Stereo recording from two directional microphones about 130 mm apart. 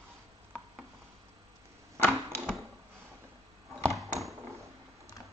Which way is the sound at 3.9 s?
Centre (ahead or behind).